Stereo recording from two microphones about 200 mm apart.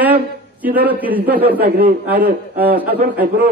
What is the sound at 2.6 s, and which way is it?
Speech, 10° right (ahead or behind).